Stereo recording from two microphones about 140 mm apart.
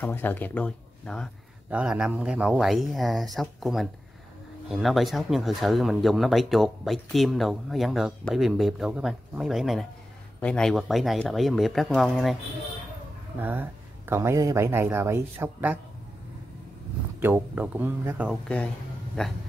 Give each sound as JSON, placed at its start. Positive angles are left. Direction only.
{"t": 0.0, "sound": "speech", "side_deg": 10}
{"t": 1.7, "sound": "speech", "side_deg": -5}
{"t": 13.4, "sound": "speech", "side_deg": -15}
{"t": 17.2, "sound": "speech", "side_deg": -15}
{"t": 19.2, "sound": "speech", "side_deg": 5}